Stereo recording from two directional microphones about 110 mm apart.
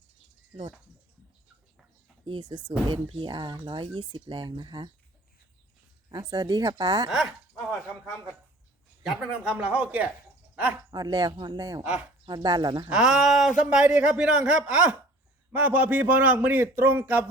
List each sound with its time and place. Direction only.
2.2 s speech: 45° right (ahead or behind)
6.1 s a woman's voice: 35° right (ahead or behind)
7.1 s speech: centre (ahead or behind)
9.0 s a man's voice: 10° right (ahead or behind)
10.9 s a woman's voice: 35° right (ahead or behind)
12.9 s a man's voice: 5° right (ahead or behind)